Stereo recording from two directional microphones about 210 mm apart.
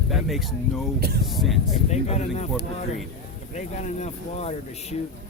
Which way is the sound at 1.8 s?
30° left (ahead or behind).